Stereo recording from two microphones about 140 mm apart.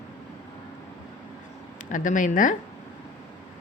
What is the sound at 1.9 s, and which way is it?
Speech, 65° left (ahead or behind).